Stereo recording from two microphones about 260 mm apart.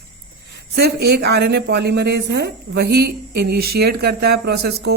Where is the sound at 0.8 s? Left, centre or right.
Right.